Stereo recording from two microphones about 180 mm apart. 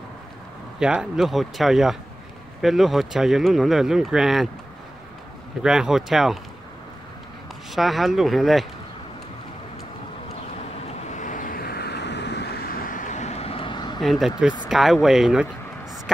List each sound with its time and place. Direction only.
0.7 s speech: 5° right (ahead or behind)
5.6 s speech: 5° right (ahead or behind)
7.7 s speech: centre (ahead or behind)
11.1 s vehicle: 45° left (ahead or behind); by 14.0 s 25° left (ahead or behind)
14.0 s speech: centre (ahead or behind)